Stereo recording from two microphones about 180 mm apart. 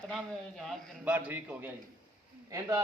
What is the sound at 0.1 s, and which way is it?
A man's voice, centre (ahead or behind).